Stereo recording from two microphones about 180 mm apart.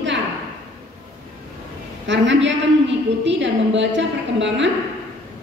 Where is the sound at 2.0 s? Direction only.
90° right.